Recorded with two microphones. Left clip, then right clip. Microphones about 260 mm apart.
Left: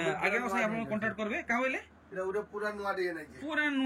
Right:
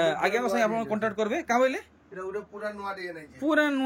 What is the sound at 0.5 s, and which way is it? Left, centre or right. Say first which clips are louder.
Speech: right 6 dB; right.